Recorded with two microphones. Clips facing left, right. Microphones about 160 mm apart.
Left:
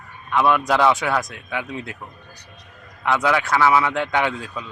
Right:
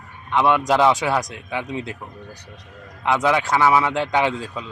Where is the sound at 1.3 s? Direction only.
30° right (ahead or behind).